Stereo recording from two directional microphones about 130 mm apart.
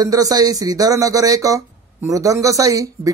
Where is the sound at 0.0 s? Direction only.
30° right (ahead or behind).